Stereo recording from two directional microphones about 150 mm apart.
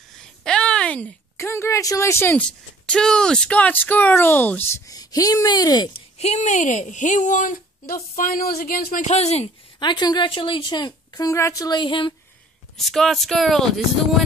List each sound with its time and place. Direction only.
0.1 s a sound: 5° left (ahead or behind)
1.4 s speech: 15° left (ahead or behind)
4.9 s speech: 25° left (ahead or behind)
5.9 s speech: 45° left (ahead or behind); by 9.0 s 70° left (ahead or behind)
9.0 s speech: 45° left (ahead or behind)
9.8 s a woman's voice: 30° left (ahead or behind)
12.7 s speech: centre (ahead or behind)